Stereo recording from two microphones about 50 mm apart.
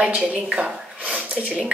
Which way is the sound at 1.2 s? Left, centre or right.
Right.